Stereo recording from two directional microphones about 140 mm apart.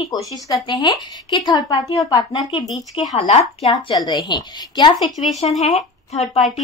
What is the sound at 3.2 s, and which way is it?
Speech, 50° left (ahead or behind).